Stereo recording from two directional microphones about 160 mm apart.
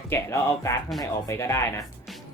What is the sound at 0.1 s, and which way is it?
Speech, 15° left (ahead or behind).